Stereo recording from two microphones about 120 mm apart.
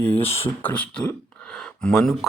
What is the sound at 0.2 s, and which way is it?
Speech, 55° left (ahead or behind).